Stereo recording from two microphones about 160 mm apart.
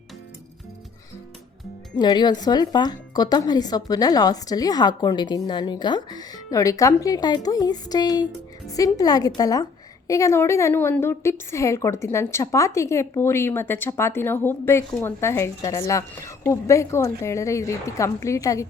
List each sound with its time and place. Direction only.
2.0 s a woman's voice: 25° left (ahead or behind)